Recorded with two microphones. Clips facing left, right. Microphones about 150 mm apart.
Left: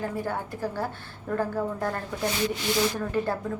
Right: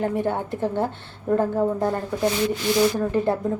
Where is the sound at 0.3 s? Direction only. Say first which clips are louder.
Right 6 dB; 25° right (ahead or behind).